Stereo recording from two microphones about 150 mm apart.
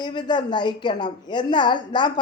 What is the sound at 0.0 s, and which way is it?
A woman's voice, 30° left (ahead or behind).